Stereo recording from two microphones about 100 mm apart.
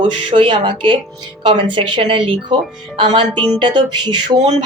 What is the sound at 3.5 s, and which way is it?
Speech, 45° right (ahead or behind).